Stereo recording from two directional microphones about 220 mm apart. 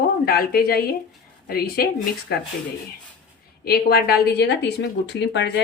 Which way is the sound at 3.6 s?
45° left (ahead or behind).